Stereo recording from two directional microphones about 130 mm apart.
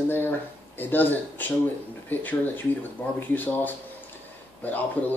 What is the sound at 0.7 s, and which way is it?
Speech, 15° left (ahead or behind).